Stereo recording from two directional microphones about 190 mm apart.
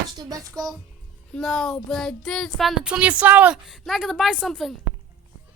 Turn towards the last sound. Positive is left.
turn(degrees=0)  # may be behind; listen again after turning